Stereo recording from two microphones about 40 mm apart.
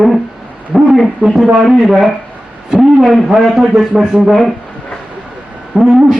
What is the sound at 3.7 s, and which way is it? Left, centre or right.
Speech, centre.